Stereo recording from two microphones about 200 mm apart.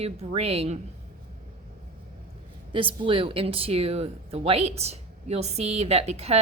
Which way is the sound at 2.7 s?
25° right (ahead or behind).